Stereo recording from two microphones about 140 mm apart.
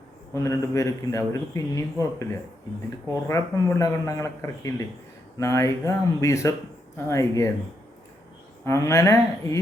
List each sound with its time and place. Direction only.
0.3 s speech: 20° left (ahead or behind)
3.2 s speech: 20° left (ahead or behind)
8.6 s speech: 20° left (ahead or behind)